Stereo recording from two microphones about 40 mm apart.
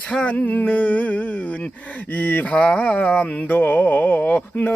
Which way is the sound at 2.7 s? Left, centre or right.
Left.